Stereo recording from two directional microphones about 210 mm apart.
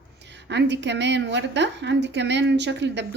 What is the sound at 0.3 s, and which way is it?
A woman's voice, 55° right (ahead or behind).